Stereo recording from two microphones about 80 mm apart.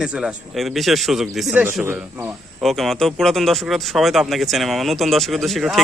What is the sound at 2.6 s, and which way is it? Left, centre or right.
Speech, centre.